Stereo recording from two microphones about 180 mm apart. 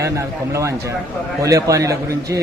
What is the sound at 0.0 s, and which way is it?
Speech, 15° right (ahead or behind).